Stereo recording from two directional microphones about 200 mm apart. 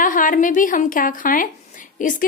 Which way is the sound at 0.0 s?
40° left (ahead or behind).